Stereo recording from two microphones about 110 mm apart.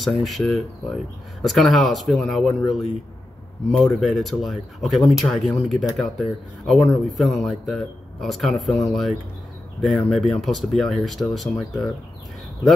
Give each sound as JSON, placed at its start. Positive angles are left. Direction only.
{"t": 0.0, "sound": "speech", "side_deg": 0}